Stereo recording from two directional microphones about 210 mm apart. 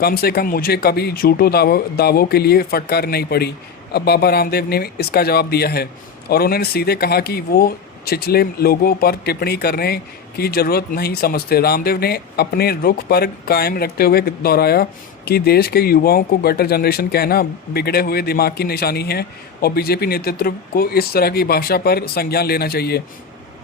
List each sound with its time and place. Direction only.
0.0 s speech: 45° left (ahead or behind)